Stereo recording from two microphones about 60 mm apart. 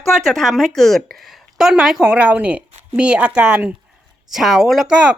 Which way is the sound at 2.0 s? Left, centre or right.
Centre.